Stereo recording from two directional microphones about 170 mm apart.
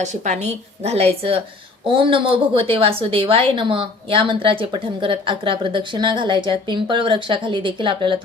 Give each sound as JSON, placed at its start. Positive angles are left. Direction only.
{"t": 0.0, "sound": "a woman's voice", "side_deg": -45}